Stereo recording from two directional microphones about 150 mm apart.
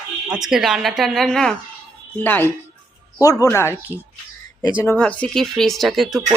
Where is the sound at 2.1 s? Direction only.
15° left (ahead or behind).